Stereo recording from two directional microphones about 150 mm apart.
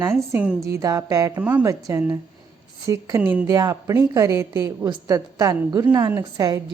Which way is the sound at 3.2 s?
10° right (ahead or behind).